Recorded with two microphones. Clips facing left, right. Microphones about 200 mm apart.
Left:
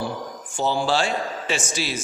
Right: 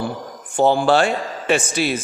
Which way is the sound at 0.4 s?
55° right (ahead or behind).